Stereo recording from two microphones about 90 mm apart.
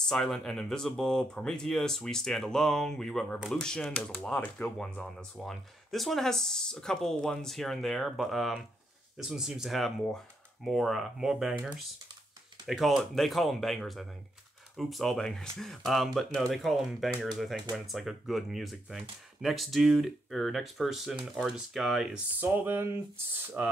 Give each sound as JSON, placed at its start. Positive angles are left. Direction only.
{"t": 0.1, "sound": "speech", "side_deg": 5}
{"t": 12.6, "sound": "speech", "side_deg": 0}
{"t": 22.4, "sound": "speech", "side_deg": -20}